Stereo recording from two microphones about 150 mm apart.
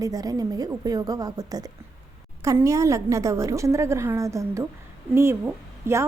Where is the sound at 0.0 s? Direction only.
25° right (ahead or behind).